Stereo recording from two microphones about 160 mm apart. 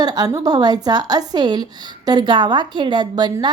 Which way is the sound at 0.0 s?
25° right (ahead or behind).